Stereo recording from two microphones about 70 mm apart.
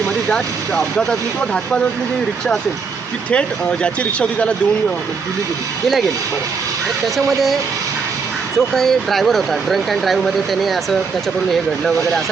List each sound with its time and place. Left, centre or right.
0.3 s speech: centre
3.2 s speech: centre
7.2 s speech: centre
11.9 s speech: centre